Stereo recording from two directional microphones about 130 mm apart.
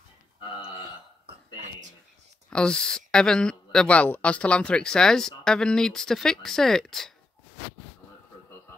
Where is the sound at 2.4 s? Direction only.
5° left (ahead or behind).